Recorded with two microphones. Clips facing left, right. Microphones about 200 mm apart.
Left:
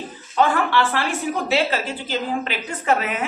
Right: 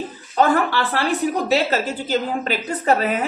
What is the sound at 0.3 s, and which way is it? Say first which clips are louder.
A woman's voice: right 1 dB; 40° right (ahead or behind).